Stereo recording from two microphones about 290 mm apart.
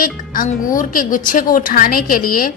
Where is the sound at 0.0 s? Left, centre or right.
Left.